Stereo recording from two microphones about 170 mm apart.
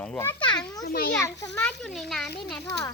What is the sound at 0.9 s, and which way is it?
Speech, 60° left (ahead or behind).